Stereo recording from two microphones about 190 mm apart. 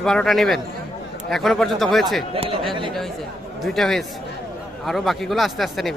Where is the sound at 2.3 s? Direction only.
30° right (ahead or behind).